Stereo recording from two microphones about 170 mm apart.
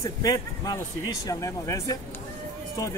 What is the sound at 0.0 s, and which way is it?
A man's voice, 20° left (ahead or behind).